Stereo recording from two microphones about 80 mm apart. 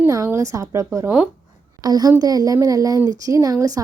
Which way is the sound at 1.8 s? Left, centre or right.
Right.